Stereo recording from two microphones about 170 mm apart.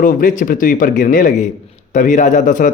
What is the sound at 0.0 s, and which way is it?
A man's voice, 55° left (ahead or behind).